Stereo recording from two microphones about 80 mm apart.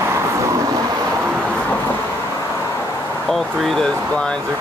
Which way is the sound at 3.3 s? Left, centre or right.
Centre.